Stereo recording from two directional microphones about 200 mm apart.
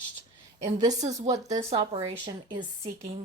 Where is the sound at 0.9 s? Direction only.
35° right (ahead or behind).